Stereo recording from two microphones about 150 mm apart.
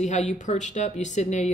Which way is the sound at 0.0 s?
55° left (ahead or behind).